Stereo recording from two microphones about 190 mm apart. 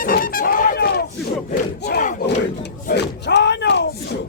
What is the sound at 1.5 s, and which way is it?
Battle cry, 50° left (ahead or behind).